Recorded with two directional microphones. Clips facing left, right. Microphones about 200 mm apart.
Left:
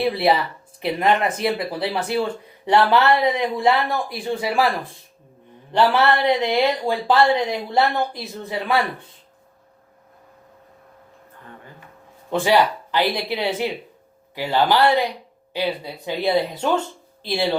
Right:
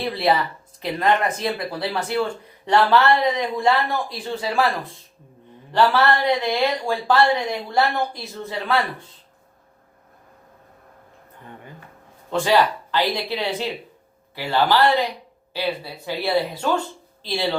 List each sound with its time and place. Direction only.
0.0 s speech: 15° left (ahead or behind)
5.7 s speech: 20° left (ahead or behind)
12.3 s speech: 15° left (ahead or behind)